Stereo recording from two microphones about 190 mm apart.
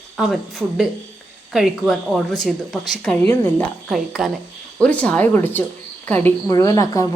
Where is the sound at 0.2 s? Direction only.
Centre (ahead or behind).